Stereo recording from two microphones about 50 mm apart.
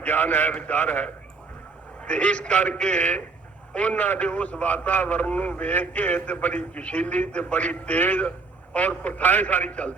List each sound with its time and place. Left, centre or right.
0.0 s a man's voice: left